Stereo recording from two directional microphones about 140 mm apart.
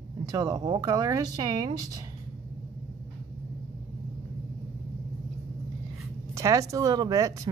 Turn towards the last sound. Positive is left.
turn(degrees=-25)  # may be behind; listen again after turning